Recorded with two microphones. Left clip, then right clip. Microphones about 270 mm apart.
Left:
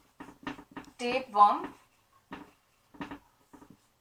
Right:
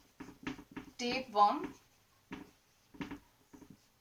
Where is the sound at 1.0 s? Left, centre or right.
Centre.